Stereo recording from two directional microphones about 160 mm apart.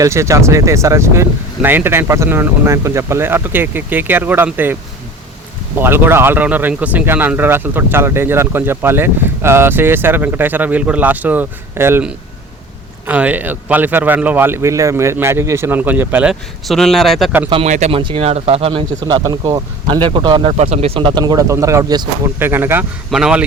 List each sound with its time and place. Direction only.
0.0 s speech: 20° right (ahead or behind); by 17.3 s centre (ahead or behind)
17.5 s speech: 45° right (ahead or behind); by 23.4 s 5° right (ahead or behind)